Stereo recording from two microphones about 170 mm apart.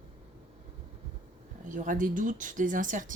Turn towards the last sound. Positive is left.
turn(degrees=-50)  # may be behind; listen again after turning